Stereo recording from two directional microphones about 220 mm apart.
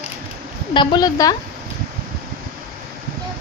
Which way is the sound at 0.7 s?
20° left (ahead or behind).